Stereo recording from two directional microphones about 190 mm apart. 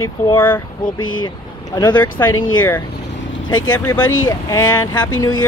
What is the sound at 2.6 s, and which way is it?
Speech, 10° left (ahead or behind).